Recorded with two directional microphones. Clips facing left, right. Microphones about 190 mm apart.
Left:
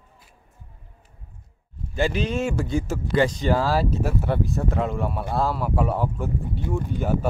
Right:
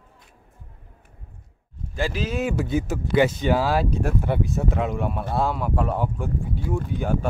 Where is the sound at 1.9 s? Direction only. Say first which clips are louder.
Left 3 dB; centre (ahead or behind).